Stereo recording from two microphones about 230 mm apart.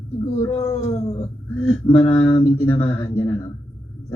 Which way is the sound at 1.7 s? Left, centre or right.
Left.